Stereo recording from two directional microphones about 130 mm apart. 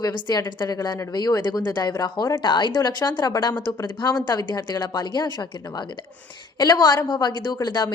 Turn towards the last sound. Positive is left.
turn(degrees=30)  # may be behind; listen again after turning